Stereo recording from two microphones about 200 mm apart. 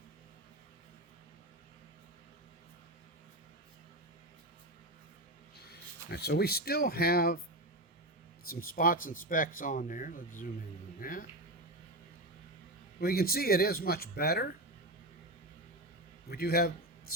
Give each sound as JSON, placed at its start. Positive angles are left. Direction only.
{"t": 6.1, "sound": "speech", "side_deg": 55}
{"t": 8.4, "sound": "speech", "side_deg": 45}
{"t": 13.0, "sound": "speech", "side_deg": 50}
{"t": 16.3, "sound": "speech", "side_deg": 50}